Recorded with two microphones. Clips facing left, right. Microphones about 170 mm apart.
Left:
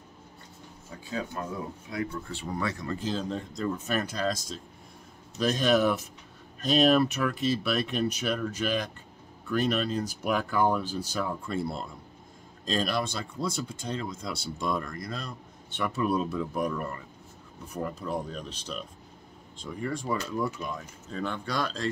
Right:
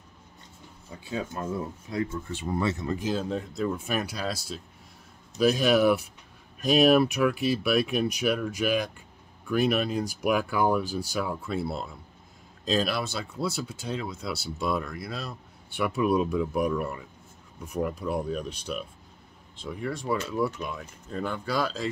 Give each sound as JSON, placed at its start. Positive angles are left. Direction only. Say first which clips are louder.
{"t": 2.3, "sound": "speech", "louder": "right 6 dB", "side_deg": -25}
{"t": 3.0, "sound": "speech", "louder": "right 2 dB", "side_deg": -10}